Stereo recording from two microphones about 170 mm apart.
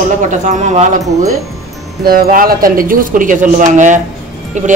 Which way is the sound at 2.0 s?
60° right (ahead or behind).